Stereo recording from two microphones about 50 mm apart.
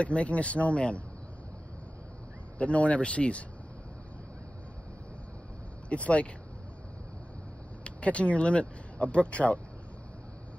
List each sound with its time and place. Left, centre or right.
0.0 s speech: left
2.6 s speech: left
5.9 s speech: left
7.8 s speech: left